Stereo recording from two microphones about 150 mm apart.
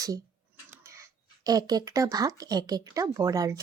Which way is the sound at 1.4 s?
25° right (ahead or behind).